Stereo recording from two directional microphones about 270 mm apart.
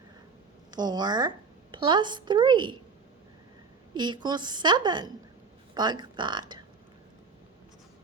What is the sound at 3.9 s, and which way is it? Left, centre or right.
A woman's voice, centre.